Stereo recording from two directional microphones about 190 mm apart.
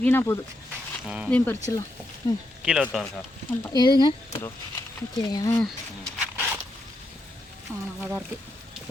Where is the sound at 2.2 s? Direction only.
20° left (ahead or behind).